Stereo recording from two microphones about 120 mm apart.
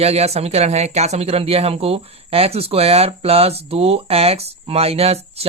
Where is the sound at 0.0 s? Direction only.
60° right (ahead or behind).